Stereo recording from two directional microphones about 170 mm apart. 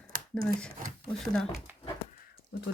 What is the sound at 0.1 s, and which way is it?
Speech, 55° right (ahead or behind).